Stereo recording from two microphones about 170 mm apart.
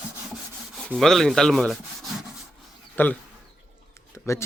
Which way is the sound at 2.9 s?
10° left (ahead or behind).